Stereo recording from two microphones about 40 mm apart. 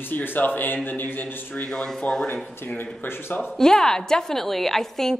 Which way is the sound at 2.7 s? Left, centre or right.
Left.